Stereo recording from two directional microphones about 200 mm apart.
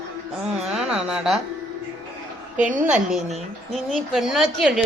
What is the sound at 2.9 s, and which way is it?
A woman's voice, centre (ahead or behind).